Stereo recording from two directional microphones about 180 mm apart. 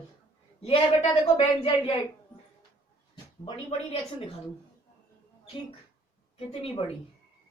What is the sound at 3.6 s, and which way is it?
Speech, 30° left (ahead or behind).